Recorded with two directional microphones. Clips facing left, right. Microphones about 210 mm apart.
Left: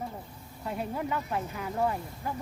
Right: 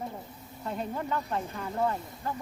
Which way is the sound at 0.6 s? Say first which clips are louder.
Left 1 dB; 10° left (ahead or behind).